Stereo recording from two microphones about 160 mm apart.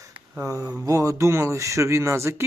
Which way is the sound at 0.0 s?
20° right (ahead or behind).